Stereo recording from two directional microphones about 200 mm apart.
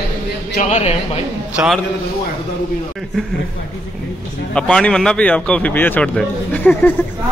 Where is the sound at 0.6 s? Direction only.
30° left (ahead or behind).